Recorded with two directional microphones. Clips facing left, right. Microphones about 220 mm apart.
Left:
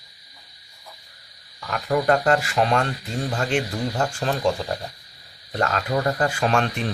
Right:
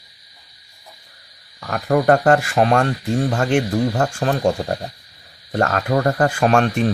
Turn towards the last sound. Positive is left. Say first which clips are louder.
# right 6 dB
turn(degrees=-50)  # may be behind; listen again after turning